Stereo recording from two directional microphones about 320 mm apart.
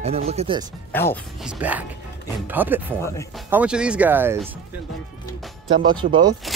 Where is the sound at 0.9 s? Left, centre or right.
Centre.